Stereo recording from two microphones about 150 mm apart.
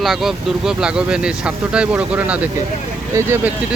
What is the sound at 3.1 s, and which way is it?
Speech, 20° right (ahead or behind).